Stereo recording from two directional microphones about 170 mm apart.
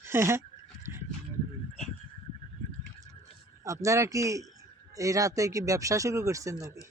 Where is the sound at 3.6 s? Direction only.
20° right (ahead or behind).